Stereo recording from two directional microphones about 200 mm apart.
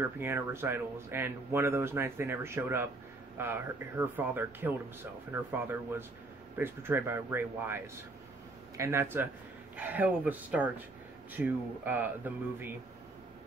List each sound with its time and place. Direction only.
0.0 s speech: 10° right (ahead or behind)